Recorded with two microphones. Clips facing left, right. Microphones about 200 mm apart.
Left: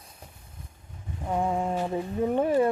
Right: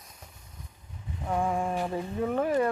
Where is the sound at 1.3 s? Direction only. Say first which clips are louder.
Left 1 dB; 20° left (ahead or behind).